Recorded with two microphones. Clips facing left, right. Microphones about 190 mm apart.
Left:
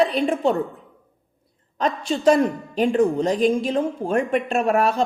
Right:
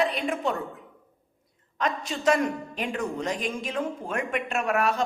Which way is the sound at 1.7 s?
35° left (ahead or behind).